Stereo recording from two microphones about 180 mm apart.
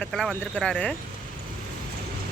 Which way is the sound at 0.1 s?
Centre (ahead or behind).